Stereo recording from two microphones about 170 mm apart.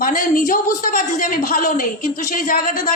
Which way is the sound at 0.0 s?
50° left (ahead or behind).